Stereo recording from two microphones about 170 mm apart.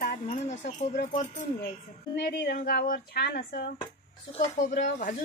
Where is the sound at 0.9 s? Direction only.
50° left (ahead or behind).